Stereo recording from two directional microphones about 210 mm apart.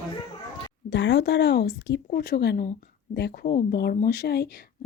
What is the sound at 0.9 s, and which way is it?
Speech, 60° left (ahead or behind).